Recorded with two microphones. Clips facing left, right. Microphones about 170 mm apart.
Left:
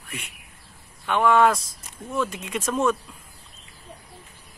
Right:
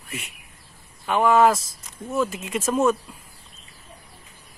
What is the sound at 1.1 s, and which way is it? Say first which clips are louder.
Speech: right 1 dB; 5° right (ahead or behind).